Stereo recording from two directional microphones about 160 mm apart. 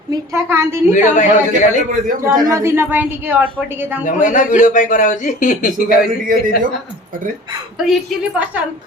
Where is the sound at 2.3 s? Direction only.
25° right (ahead or behind).